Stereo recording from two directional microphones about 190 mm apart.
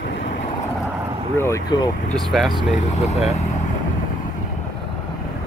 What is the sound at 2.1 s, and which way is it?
Speech, centre (ahead or behind).